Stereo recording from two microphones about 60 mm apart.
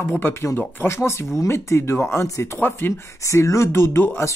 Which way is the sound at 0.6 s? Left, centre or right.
Left.